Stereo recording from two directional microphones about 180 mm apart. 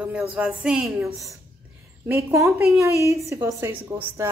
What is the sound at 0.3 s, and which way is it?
Speech, 5° right (ahead or behind).